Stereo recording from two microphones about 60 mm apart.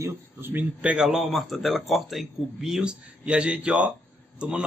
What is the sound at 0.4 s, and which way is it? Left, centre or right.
Speech, right.